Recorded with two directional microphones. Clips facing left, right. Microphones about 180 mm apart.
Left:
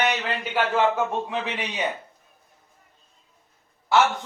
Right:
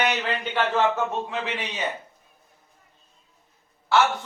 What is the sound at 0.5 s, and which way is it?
A man's voice, 10° left (ahead or behind).